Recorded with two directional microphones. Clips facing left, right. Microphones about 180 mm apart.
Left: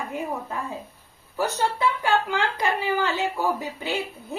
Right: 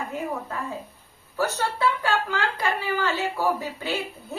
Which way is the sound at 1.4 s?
15° left (ahead or behind).